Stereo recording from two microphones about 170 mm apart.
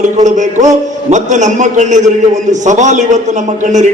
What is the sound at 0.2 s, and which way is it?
A man's voice, 45° right (ahead or behind).